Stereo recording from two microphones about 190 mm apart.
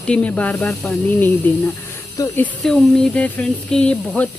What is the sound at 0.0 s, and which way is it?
Speech, 5° left (ahead or behind).